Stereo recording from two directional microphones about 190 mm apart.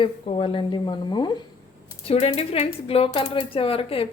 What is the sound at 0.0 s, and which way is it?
Speech, 30° left (ahead or behind).